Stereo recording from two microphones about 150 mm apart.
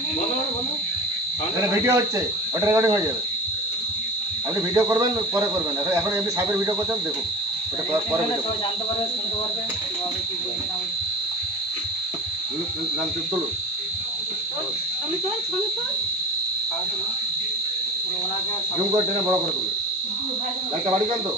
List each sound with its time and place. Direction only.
1.8 s speech: 20° right (ahead or behind)
4.7 s speech: 25° right (ahead or behind)